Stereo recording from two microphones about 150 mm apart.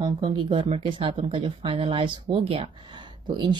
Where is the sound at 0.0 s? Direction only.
35° right (ahead or behind).